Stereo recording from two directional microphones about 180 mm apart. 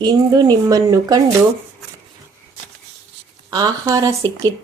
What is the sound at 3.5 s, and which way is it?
Speech, 20° right (ahead or behind).